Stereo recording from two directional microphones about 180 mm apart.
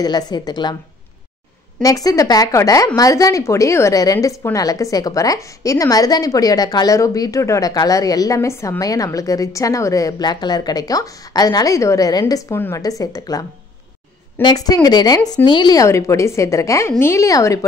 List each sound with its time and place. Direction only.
0.0 s a woman's voice: 20° left (ahead or behind)
1.8 s a woman's voice: 20° left (ahead or behind)